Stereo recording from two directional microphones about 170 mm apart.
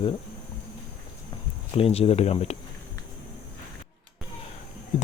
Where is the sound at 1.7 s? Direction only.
35° left (ahead or behind).